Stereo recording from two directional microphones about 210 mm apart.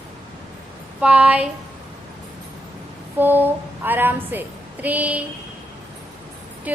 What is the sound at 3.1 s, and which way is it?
A woman's voice, 10° right (ahead or behind).